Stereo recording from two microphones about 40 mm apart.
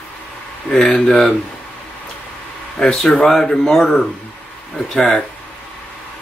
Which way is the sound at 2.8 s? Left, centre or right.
Centre.